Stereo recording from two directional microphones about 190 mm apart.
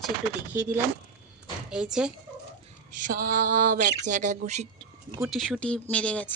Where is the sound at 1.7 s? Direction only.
5° right (ahead or behind).